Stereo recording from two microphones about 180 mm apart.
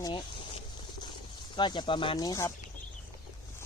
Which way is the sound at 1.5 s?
25° left (ahead or behind).